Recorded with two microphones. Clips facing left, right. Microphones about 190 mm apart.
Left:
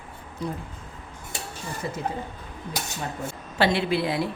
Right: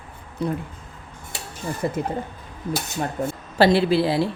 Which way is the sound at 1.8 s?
50° right (ahead or behind).